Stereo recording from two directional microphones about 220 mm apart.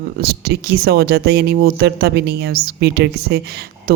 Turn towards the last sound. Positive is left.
turn(degrees=-45)  # may be behind; listen again after turning